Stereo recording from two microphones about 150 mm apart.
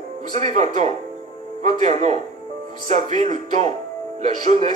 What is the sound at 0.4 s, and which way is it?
Speech, 50° right (ahead or behind).